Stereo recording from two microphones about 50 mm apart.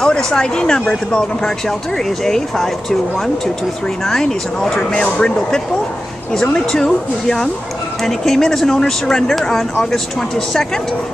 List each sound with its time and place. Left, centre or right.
0.0 s speech: centre